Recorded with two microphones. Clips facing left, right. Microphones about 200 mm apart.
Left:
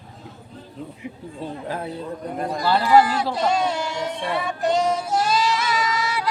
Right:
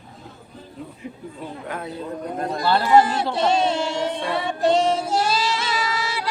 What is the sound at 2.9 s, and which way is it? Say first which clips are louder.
Child singing: even; 25° right (ahead or behind).